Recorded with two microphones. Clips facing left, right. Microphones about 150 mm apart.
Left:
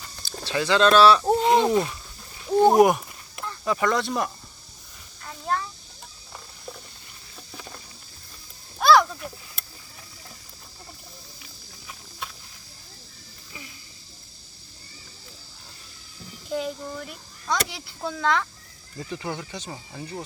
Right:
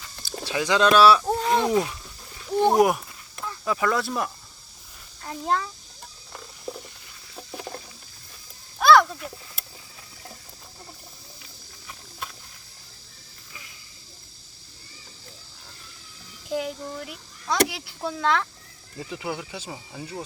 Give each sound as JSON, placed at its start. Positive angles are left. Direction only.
{"t": 0.2, "sound": "speech", "side_deg": -10}
{"t": 1.2, "sound": "a sound", "side_deg": 20}
{"t": 1.7, "sound": "speech", "side_deg": -5}
{"t": 2.5, "sound": "speech", "side_deg": 10}
{"t": 8.8, "sound": "a sound", "side_deg": 0}
{"t": 16.5, "sound": "speech", "side_deg": -5}